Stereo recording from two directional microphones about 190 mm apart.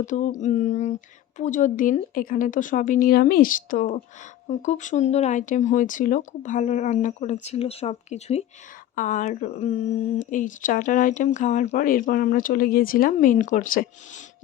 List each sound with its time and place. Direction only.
0.0 s speech: 40° left (ahead or behind)